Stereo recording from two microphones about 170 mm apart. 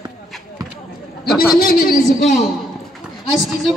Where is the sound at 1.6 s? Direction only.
60° left (ahead or behind).